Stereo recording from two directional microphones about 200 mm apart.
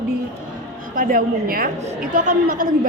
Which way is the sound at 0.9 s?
45° right (ahead or behind).